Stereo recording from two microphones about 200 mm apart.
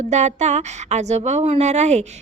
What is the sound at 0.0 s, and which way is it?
A woman's voice, 35° right (ahead or behind).